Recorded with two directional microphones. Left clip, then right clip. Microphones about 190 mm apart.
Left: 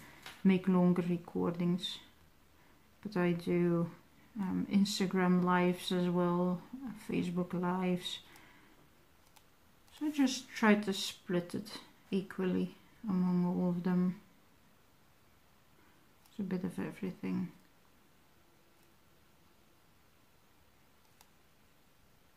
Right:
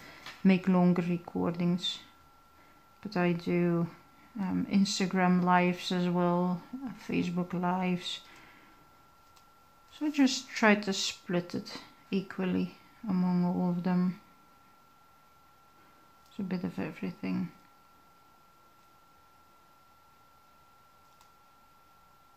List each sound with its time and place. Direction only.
0.5 s speech: 40° right (ahead or behind)
3.0 s speech: 35° right (ahead or behind)
10.1 s speech: 35° right (ahead or behind)
16.3 s speech: 35° right (ahead or behind)